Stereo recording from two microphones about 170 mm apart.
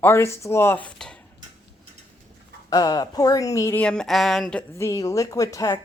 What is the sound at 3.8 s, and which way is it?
Speech, 5° left (ahead or behind).